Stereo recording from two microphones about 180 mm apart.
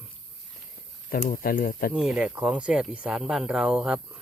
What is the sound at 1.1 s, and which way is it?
Speech, 55° left (ahead or behind).